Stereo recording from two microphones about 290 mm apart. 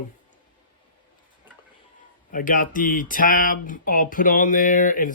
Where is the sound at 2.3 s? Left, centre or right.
Left.